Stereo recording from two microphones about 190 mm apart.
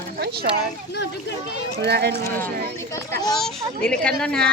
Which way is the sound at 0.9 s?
60° left (ahead or behind).